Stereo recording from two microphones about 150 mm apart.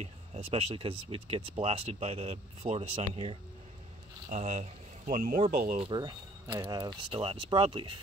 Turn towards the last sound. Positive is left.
turn(degrees=-35)  # may be behind; listen again after turning